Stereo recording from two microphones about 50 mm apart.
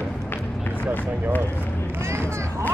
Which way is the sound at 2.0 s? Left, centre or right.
Right.